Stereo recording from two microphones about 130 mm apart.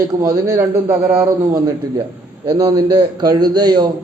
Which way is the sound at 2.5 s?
30° right (ahead or behind).